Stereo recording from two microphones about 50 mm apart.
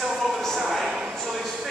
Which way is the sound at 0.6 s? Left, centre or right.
Centre.